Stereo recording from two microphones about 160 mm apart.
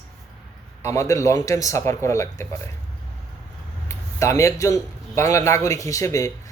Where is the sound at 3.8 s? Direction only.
20° left (ahead or behind).